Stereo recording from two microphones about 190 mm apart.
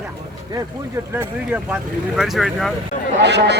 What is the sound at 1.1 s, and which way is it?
Speech, 10° right (ahead or behind).